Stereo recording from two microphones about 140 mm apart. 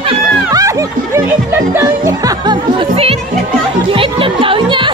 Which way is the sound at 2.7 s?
45° right (ahead or behind).